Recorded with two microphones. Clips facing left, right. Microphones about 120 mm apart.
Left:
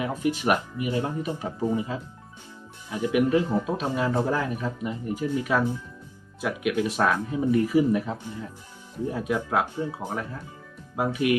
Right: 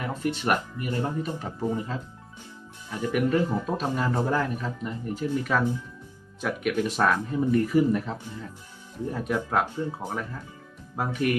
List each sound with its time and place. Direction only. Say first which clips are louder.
0.0 s speech: left 3 dB; 10° left (ahead or behind)
9.7 s speech: left 1 dB; 15° left (ahead or behind)